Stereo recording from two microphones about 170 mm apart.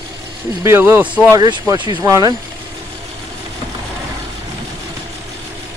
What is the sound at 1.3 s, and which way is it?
Speech, 20° right (ahead or behind).